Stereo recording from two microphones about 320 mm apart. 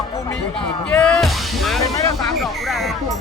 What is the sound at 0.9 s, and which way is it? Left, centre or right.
Music, centre.